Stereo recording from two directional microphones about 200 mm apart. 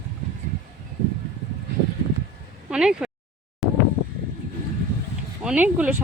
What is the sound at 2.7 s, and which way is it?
Speech, 5° right (ahead or behind).